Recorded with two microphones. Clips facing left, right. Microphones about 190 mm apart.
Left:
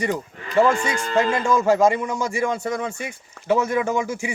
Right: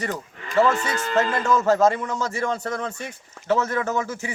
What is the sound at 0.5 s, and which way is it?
Speech, 15° left (ahead or behind).